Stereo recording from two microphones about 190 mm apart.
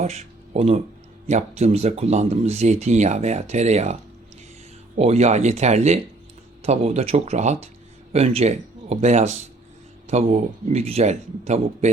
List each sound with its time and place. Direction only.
0.0 s a sound: 35° right (ahead or behind)
1.3 s speech: 35° right (ahead or behind)
4.9 s speech: 35° right (ahead or behind)